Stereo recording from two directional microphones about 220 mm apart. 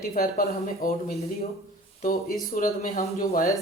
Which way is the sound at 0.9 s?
30° left (ahead or behind).